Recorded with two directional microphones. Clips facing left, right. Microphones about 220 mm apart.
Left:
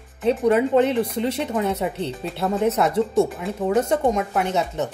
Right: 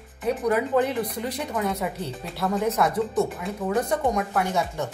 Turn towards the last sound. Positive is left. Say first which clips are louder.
# left 3 dB
turn(degrees=20)  # may be behind; listen again after turning